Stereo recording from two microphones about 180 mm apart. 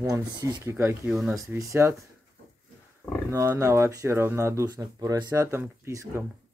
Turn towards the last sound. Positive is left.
turn(degrees=-15)  # may be behind; listen again after turning